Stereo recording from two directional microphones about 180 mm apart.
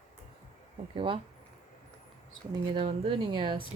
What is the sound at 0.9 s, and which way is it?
Speech, 30° right (ahead or behind).